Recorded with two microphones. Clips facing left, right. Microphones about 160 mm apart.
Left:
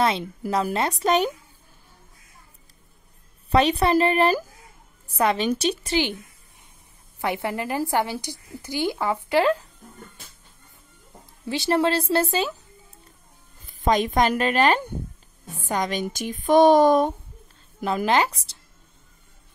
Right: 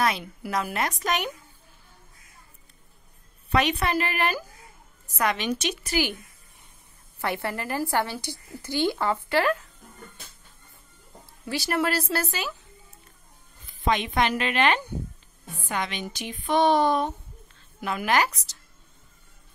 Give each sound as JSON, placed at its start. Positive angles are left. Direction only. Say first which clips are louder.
{"t": 0.5, "sound": "speech", "louder": "left 4 dB", "side_deg": 30}
{"t": 3.4, "sound": "speech", "louder": "left 5 dB", "side_deg": 35}
{"t": 7.2, "sound": "a woman's voice", "louder": "left 3 dB", "side_deg": 15}
{"t": 11.4, "sound": "speech", "louder": "left 5 dB", "side_deg": 20}
{"t": 13.7, "sound": "speech", "louder": "left 4 dB", "side_deg": 40}
{"t": 17.8, "sound": "speech", "louder": "left 3 dB", "side_deg": 30}